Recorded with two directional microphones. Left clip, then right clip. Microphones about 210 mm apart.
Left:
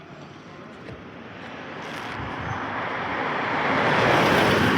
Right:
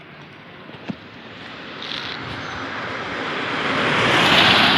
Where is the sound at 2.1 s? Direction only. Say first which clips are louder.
Right 1 dB; 40° right (ahead or behind).